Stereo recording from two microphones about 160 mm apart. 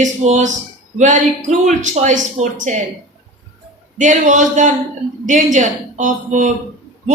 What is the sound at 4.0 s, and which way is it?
Speech, 55° right (ahead or behind).